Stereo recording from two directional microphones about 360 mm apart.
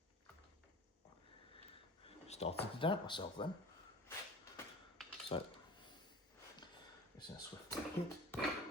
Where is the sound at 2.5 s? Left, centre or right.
Centre.